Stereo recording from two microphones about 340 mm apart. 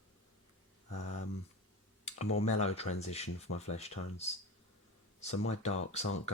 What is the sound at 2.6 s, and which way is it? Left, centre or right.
Speech, centre.